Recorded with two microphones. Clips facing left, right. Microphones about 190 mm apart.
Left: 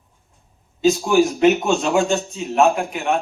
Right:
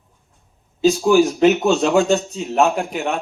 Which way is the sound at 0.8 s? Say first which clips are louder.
Right 2 dB; 35° right (ahead or behind).